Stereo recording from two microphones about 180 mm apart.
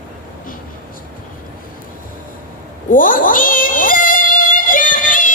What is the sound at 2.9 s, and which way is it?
Music, 50° left (ahead or behind).